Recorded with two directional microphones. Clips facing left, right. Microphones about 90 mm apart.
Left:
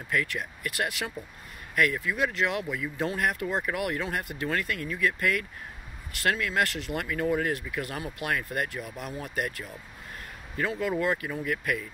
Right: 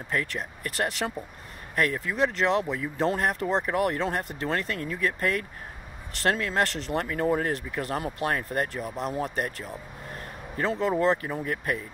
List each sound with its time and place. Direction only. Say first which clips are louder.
0.1 s speech: even; 35° right (ahead or behind)
10.8 s speech: right 5 dB; 35° right (ahead or behind)